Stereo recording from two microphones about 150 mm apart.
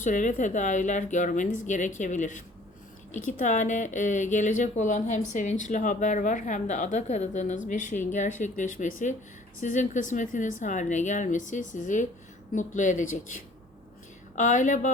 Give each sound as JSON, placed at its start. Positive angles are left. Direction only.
{"t": 0.0, "sound": "speech", "side_deg": 55}